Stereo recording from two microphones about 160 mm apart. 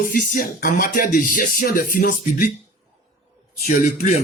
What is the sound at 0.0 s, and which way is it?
Music, 60° left (ahead or behind).